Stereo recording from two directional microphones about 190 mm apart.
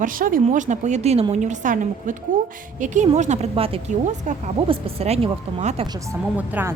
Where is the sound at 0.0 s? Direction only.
45° right (ahead or behind).